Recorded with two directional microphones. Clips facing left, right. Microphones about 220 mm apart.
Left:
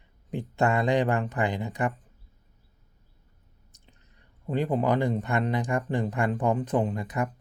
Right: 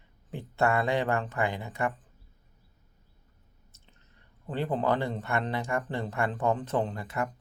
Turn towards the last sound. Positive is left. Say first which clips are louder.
# left 3 dB
turn(degrees=15)  # may be behind; listen again after turning